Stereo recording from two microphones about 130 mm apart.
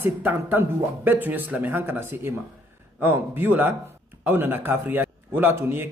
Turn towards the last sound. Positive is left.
turn(degrees=-15)  # may be behind; listen again after turning